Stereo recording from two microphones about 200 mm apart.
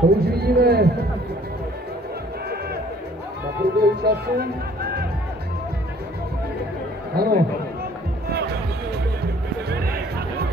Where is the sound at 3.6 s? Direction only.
55° right (ahead or behind).